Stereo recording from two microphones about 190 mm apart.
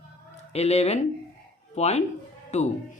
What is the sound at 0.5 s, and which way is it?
Speech, 35° left (ahead or behind).